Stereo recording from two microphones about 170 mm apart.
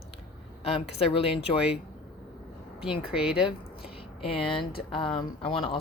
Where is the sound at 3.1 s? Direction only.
5° right (ahead or behind).